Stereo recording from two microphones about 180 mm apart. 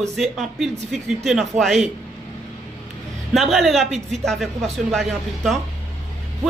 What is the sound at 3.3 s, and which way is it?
A woman's voice, centre (ahead or behind).